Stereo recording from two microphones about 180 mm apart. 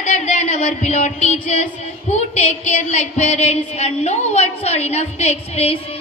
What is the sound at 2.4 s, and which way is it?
A woman's voice, 40° left (ahead or behind).